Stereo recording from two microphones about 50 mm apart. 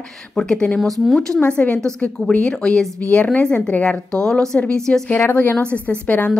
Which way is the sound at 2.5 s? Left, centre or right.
Centre.